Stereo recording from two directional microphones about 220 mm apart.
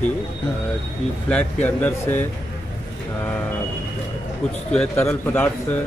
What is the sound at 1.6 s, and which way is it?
Speech, 10° left (ahead or behind).